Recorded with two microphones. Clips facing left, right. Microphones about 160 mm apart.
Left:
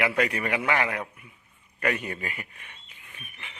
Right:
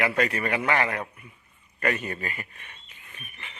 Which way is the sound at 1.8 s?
10° left (ahead or behind).